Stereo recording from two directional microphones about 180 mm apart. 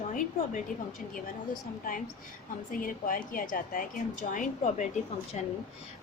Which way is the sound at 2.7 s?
50° left (ahead or behind).